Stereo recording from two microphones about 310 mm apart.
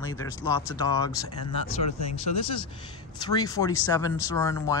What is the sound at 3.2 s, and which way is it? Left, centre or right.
Speech, centre.